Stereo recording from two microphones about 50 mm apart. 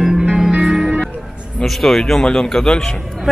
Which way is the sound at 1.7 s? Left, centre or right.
Centre.